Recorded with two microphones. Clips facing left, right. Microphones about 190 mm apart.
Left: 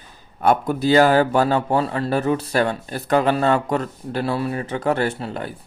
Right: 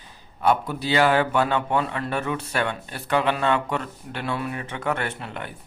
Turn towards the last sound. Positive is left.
turn(degrees=35)  # may be behind; listen again after turning